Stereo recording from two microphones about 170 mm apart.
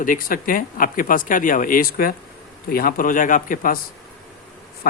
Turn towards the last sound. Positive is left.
turn(degrees=55)  # may be behind; listen again after turning